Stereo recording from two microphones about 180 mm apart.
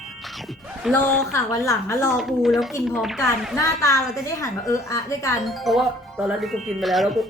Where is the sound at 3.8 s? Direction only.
20° left (ahead or behind).